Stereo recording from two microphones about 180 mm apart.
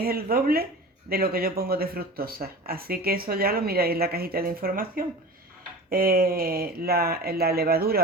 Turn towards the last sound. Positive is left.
turn(degrees=-55)  # may be behind; listen again after turning